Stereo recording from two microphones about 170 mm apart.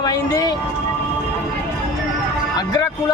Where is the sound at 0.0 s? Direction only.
25° left (ahead or behind).